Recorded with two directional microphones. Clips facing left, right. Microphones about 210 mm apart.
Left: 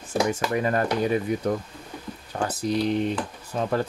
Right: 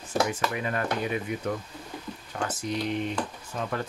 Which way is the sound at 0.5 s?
40° left (ahead or behind).